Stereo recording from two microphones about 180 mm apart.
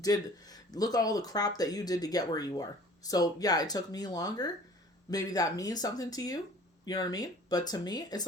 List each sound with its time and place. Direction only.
0.0 s speech: 20° left (ahead or behind)